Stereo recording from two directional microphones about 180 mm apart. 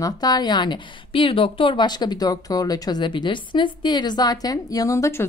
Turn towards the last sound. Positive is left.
turn(degrees=15)  # may be behind; listen again after turning